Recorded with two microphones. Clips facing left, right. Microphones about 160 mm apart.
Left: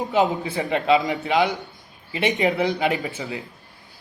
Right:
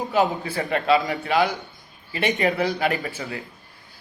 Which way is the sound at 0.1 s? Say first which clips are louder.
Left 1 dB; 20° left (ahead or behind).